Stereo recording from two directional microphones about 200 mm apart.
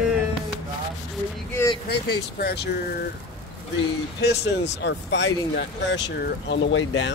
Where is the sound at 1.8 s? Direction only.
55° left (ahead or behind).